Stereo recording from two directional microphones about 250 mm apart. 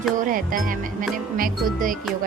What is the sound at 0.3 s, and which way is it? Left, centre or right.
Speech, right.